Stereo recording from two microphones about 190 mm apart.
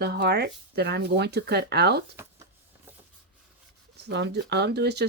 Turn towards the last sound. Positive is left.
turn(degrees=-60)  # may be behind; listen again after turning